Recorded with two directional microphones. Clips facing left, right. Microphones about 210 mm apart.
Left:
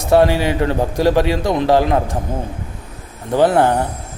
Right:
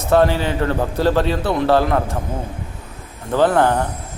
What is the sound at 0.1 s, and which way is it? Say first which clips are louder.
A man's voice: left 2 dB; 15° left (ahead or behind).